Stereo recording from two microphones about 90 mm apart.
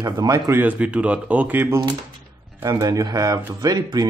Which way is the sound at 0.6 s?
15° right (ahead or behind).